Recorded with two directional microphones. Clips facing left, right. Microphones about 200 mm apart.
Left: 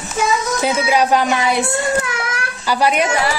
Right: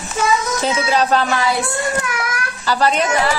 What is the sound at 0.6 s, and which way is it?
Speech, 10° left (ahead or behind).